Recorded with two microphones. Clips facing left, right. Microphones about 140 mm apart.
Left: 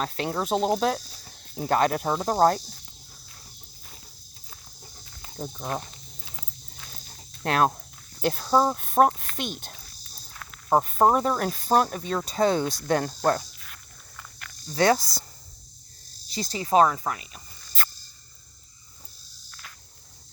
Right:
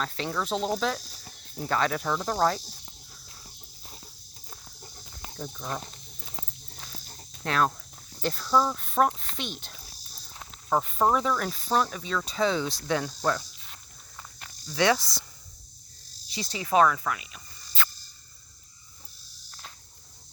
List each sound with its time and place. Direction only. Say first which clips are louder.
0.0 s speech: left 3 dB; 45° left (ahead or behind)
2.0 s cricket: left 4 dB; 35° left (ahead or behind)
7.4 s speech: left 3 dB; 45° left (ahead or behind)
14.8 s cricket: left 3 dB; 40° left (ahead or behind)
16.3 s speech: left 3 dB; 40° left (ahead or behind)